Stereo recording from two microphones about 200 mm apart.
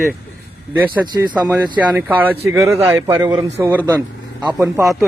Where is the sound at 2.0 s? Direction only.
10° right (ahead or behind).